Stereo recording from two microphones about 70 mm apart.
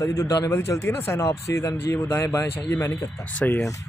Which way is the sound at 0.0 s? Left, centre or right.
Left.